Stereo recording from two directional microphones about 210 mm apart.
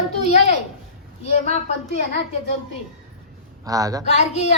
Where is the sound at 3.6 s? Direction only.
15° right (ahead or behind).